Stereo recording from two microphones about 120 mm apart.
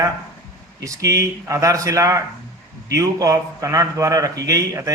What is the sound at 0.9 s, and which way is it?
A man's voice, 25° right (ahead or behind).